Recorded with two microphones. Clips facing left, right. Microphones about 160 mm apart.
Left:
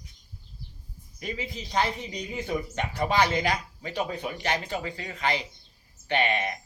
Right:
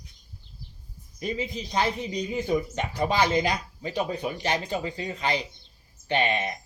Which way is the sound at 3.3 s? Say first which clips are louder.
Right 2 dB; 25° right (ahead or behind).